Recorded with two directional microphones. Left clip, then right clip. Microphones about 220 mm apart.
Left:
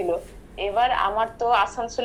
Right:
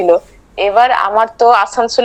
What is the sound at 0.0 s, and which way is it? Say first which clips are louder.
A woman's voice: right 15 dB; 50° right (ahead or behind).